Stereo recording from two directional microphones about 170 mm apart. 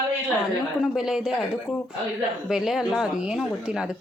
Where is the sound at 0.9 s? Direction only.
5° right (ahead or behind).